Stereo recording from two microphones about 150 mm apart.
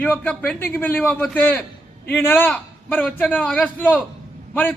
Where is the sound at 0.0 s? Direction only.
5° left (ahead or behind).